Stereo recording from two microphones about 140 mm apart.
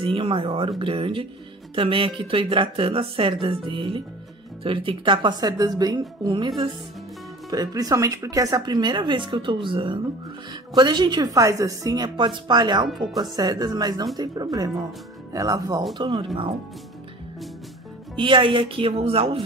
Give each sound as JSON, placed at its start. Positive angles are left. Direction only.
{"t": 0.0, "sound": "speech", "side_deg": -40}
{"t": 12.8, "sound": "speech", "side_deg": 0}
{"t": 13.2, "sound": "speech", "side_deg": -30}
{"t": 18.1, "sound": "speech", "side_deg": -35}